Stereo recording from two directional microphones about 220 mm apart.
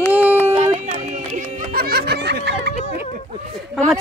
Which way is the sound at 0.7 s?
30° right (ahead or behind).